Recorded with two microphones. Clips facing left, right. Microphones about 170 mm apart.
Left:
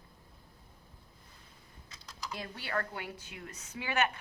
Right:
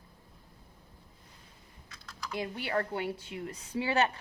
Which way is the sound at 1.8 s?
20° left (ahead or behind).